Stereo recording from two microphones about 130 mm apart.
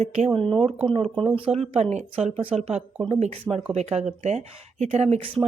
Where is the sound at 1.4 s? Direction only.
50° right (ahead or behind).